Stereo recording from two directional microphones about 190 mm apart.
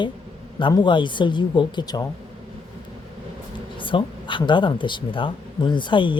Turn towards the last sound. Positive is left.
turn(degrees=25)  # may be behind; listen again after turning